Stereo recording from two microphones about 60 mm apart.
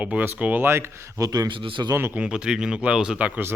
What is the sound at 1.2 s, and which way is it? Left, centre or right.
Speech, right.